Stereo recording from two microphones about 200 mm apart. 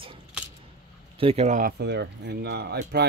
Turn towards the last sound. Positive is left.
turn(degrees=-55)  # may be behind; listen again after turning